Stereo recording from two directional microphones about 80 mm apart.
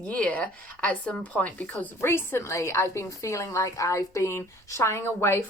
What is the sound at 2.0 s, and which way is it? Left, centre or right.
A woman's voice, left.